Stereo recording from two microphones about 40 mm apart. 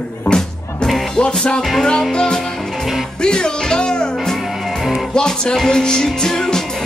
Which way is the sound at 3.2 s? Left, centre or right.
Centre.